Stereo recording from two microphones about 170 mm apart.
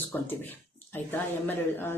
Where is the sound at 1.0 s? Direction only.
10° left (ahead or behind).